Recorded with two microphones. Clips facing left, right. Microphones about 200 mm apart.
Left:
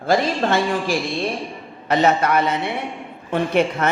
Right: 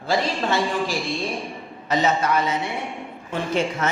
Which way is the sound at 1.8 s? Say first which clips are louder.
Left 4 dB; 60° left (ahead or behind).